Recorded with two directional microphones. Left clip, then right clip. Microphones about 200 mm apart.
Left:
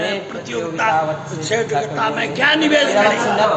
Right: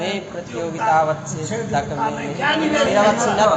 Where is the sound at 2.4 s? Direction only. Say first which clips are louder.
Left 5 dB; 50° left (ahead or behind).